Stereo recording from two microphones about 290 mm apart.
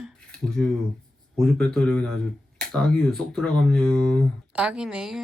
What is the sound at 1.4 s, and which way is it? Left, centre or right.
Speech, centre.